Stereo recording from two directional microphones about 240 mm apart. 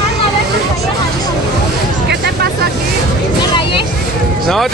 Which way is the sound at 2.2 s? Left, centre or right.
Right.